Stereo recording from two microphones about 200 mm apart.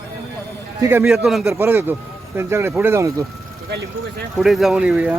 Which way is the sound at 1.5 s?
10° right (ahead or behind).